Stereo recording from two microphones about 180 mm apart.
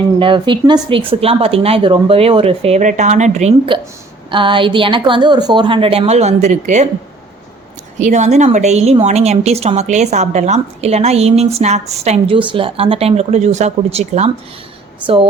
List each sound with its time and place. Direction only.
0.2 s a woman's voice: 30° right (ahead or behind)
4.3 s a woman's voice: 25° right (ahead or behind)
7.9 s a woman's voice: 40° right (ahead or behind)